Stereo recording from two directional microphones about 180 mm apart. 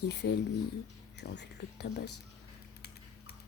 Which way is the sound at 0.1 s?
65° left (ahead or behind).